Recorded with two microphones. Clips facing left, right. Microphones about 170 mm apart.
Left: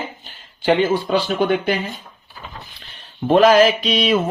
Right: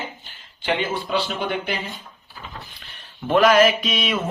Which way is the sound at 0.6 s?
40° left (ahead or behind).